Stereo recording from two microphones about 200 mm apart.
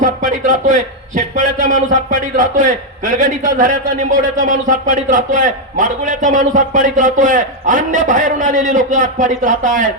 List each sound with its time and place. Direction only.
0.0 s a man's voice: 40° right (ahead or behind)